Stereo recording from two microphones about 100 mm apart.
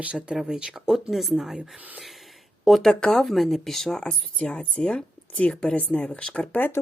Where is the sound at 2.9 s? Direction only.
5° left (ahead or behind).